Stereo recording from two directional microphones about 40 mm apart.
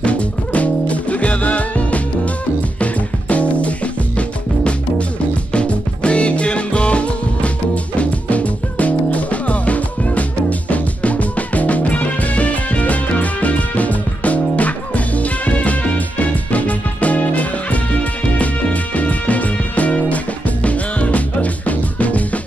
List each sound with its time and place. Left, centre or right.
0.0 s music: left
5.5 s music: left